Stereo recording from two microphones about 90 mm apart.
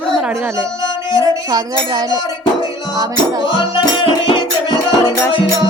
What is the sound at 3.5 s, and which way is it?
Music, 70° left (ahead or behind).